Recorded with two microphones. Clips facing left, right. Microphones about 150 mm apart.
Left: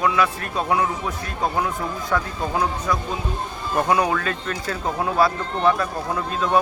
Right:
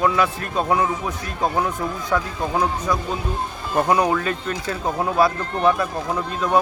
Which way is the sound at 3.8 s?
25° right (ahead or behind).